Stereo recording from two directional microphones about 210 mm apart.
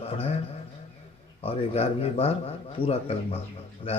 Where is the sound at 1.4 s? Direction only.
30° left (ahead or behind).